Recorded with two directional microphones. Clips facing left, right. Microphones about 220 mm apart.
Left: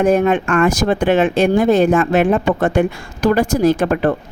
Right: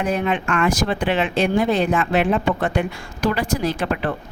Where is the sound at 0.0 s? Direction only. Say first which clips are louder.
Left 8 dB; 45° left (ahead or behind).